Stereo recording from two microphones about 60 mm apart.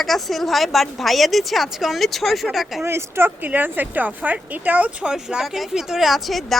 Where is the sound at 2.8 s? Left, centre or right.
Right.